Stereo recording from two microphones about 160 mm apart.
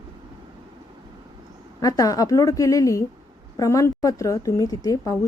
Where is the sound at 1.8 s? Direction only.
20° left (ahead or behind).